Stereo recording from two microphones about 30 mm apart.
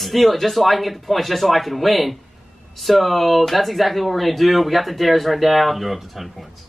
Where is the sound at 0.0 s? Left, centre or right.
Centre.